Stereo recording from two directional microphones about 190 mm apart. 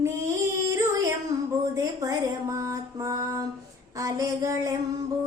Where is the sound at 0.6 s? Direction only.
15° right (ahead or behind).